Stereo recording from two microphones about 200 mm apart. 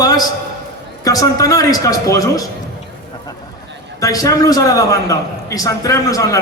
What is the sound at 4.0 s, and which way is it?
A man's voice, 15° left (ahead or behind).